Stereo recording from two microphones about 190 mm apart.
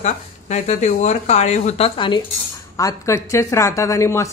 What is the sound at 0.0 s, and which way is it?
A woman's voice, 35° left (ahead or behind).